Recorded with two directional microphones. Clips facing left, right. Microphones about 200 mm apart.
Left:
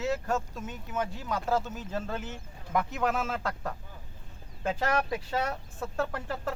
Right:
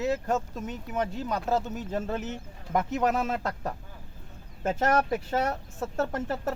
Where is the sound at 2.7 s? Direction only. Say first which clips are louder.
Right 3 dB; 40° right (ahead or behind).